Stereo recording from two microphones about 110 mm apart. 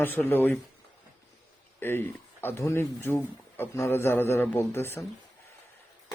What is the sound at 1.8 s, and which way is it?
A man's voice, 20° left (ahead or behind).